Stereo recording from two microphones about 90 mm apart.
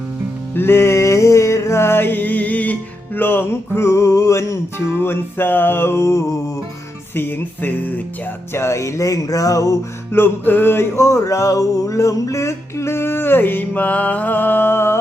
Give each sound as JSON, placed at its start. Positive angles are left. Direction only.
{"t": 0.5, "sound": "music", "side_deg": 25}
{"t": 8.5, "sound": "music", "side_deg": 30}
{"t": 10.2, "sound": "music", "side_deg": 25}